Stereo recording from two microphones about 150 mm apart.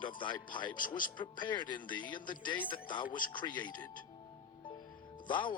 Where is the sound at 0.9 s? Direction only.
65° left (ahead or behind).